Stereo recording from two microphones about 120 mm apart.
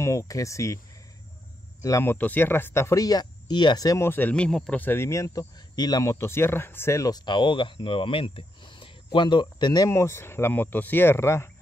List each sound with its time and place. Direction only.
0.0 s speech: 25° left (ahead or behind)
1.8 s speech: 25° left (ahead or behind)
6.1 s speech: 20° left (ahead or behind); by 9.8 s 35° left (ahead or behind)
9.8 s speech: 20° left (ahead or behind)